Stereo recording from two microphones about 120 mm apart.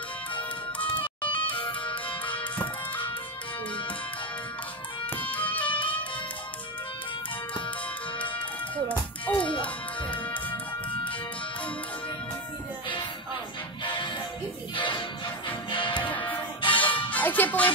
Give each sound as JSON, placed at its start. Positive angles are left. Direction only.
{"t": 0.9, "sound": "music", "side_deg": 45}
{"t": 1.7, "sound": "music", "side_deg": 10}
{"t": 5.3, "sound": "music", "side_deg": 15}
{"t": 8.2, "sound": "music", "side_deg": 10}
{"t": 13.8, "sound": "music", "side_deg": 40}
{"t": 16.1, "sound": "music", "side_deg": 15}